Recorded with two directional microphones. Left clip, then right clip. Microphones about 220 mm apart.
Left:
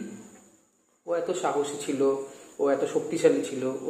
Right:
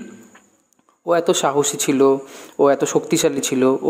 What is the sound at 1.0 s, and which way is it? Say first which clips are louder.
Speech: right 10 dB; 55° right (ahead or behind).